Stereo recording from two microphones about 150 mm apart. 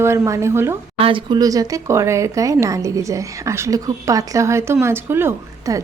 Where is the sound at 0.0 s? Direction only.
20° right (ahead or behind).